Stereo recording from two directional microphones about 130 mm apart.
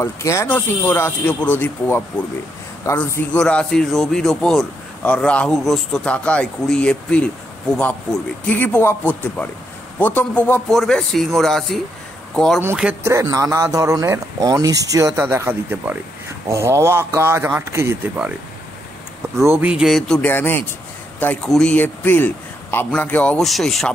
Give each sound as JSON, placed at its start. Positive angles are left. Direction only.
{"t": 0.0, "sound": "a man's voice", "side_deg": 20}
{"t": 10.7, "sound": "speech", "side_deg": 0}
{"t": 13.0, "sound": "speech", "side_deg": -25}
{"t": 19.4, "sound": "speech", "side_deg": -20}
{"t": 19.7, "sound": "speech", "side_deg": 0}
{"t": 20.2, "sound": "a man's voice", "side_deg": 15}